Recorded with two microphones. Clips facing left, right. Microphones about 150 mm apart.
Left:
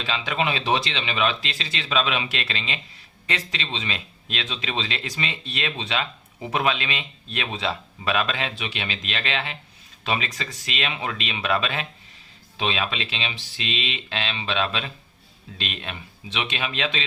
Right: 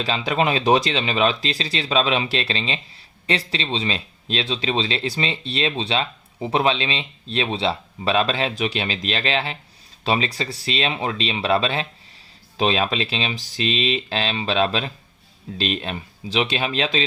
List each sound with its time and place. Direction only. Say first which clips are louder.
0.0 s speech: right 5 dB; 40° right (ahead or behind)